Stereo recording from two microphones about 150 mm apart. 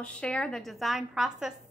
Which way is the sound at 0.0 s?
5° left (ahead or behind).